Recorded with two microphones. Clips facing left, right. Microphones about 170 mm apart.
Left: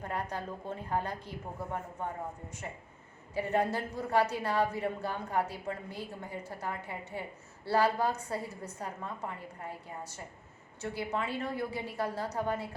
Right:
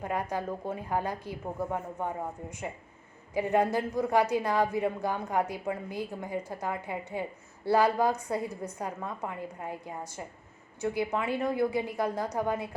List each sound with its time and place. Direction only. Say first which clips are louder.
0.0 s a woman's voice: right 5 dB; 10° right (ahead or behind)
3.3 s a woman's voice: right 4 dB; 10° right (ahead or behind)